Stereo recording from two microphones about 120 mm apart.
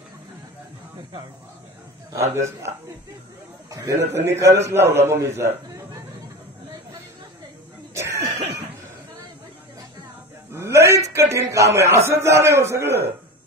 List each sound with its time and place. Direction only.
2.1 s a man's voice: 25° right (ahead or behind)
3.7 s a man's voice: 25° right (ahead or behind)
7.9 s throat clearing: 25° right (ahead or behind)
10.5 s a sound: 25° right (ahead or behind)
11.1 s a man's voice: 25° right (ahead or behind)